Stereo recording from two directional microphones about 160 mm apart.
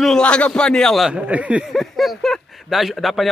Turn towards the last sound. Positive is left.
turn(degrees=0)  # may be behind; listen again after turning